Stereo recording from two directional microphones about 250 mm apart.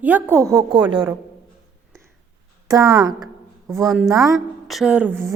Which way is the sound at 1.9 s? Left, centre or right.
Centre.